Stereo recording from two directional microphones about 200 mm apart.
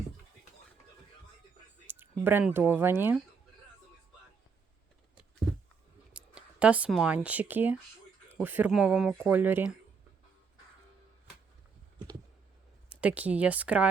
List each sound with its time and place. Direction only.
1.9 s speech: 10° right (ahead or behind)
6.1 s speech: 5° right (ahead or behind)
12.9 s speech: 5° right (ahead or behind)